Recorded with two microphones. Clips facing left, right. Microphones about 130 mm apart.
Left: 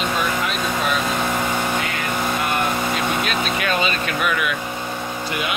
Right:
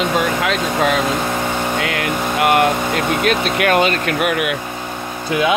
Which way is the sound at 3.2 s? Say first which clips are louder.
Right 6 dB; 65° right (ahead or behind).